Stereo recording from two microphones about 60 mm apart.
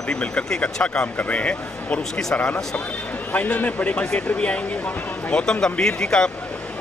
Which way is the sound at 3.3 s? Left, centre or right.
Left.